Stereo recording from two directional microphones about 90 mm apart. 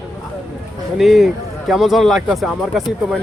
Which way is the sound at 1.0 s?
Centre (ahead or behind).